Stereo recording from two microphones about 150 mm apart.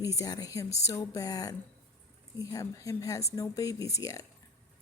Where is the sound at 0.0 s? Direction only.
20° left (ahead or behind).